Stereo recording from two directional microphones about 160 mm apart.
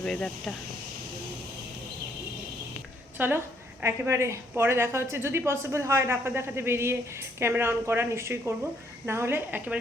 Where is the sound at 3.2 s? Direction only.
10° right (ahead or behind).